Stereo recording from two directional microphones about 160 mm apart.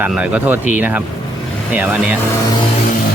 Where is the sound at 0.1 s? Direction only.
5° right (ahead or behind).